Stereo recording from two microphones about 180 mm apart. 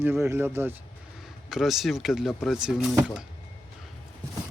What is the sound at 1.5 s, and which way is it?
Speech, centre (ahead or behind).